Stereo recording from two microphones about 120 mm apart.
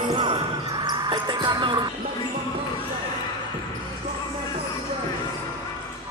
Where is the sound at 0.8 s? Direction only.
40° right (ahead or behind).